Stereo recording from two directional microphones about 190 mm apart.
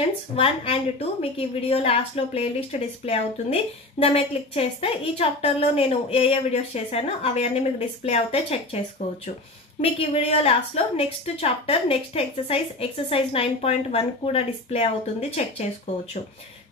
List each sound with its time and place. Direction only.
0.4 s a woman's voice: 30° left (ahead or behind)
9.8 s a woman's voice: 30° left (ahead or behind)